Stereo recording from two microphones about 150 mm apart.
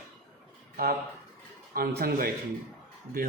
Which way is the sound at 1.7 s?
90° right.